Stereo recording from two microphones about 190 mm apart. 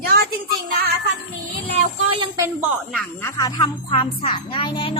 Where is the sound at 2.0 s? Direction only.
30° right (ahead or behind).